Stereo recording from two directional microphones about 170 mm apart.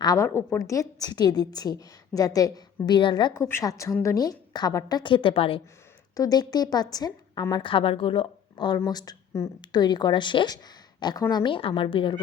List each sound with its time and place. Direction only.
0.0 s a woman's voice: 20° left (ahead or behind)
6.1 s a woman's voice: 20° left (ahead or behind)